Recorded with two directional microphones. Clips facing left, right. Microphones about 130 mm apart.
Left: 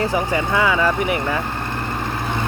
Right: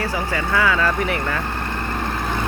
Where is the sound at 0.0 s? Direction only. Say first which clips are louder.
Left 4 dB; 20° left (ahead or behind).